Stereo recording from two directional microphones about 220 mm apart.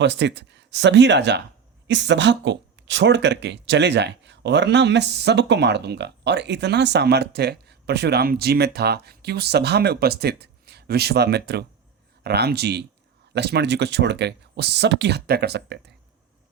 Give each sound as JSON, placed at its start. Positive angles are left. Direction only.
{"t": 0.0, "sound": "speech", "side_deg": -50}